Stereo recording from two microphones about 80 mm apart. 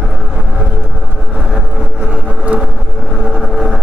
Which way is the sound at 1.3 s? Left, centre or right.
Centre.